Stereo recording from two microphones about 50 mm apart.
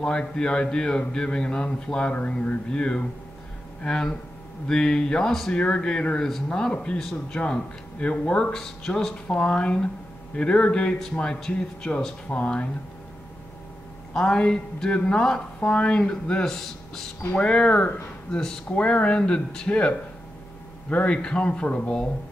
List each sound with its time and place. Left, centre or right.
0.0 s speech: centre
9.3 s speech: left
14.1 s speech: centre
17.3 s speech: left
18.7 s speech: left